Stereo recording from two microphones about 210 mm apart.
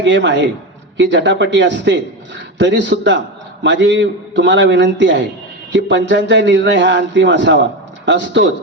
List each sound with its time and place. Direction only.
0.0 s a man's voice: 60° right (ahead or behind)